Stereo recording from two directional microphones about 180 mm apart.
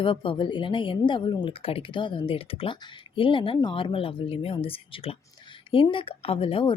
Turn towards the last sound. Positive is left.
turn(degrees=30)  # may be behind; listen again after turning